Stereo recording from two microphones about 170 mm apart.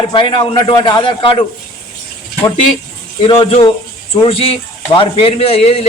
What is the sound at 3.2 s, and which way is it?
A man's voice, 25° left (ahead or behind).